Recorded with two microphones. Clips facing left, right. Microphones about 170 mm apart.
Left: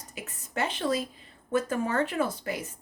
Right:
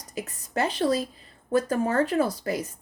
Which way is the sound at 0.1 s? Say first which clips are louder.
Right 6 dB; 40° right (ahead or behind).